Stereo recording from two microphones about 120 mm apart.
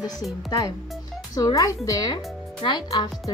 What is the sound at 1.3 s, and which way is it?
Speech, 30° left (ahead or behind).